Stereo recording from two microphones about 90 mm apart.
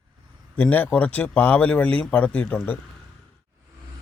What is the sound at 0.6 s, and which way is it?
Speech, 15° left (ahead or behind).